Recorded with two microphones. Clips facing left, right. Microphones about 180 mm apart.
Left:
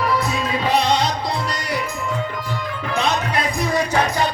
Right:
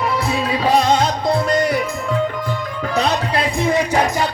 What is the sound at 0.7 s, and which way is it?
Music, 45° right (ahead or behind).